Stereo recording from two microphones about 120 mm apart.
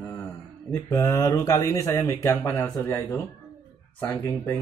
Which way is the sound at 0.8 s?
25° left (ahead or behind).